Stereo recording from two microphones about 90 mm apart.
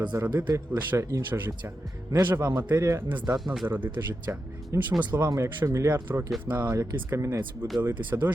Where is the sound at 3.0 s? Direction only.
20° right (ahead or behind).